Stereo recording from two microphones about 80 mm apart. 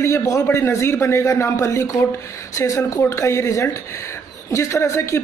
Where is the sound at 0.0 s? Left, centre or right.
Left.